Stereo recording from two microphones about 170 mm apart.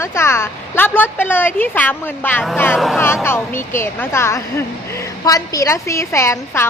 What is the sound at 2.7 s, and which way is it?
Speech, centre (ahead or behind).